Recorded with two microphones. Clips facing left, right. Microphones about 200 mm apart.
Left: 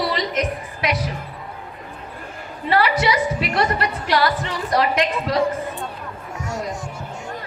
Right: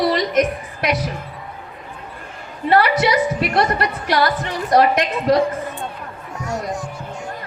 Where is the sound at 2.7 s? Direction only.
50° right (ahead or behind).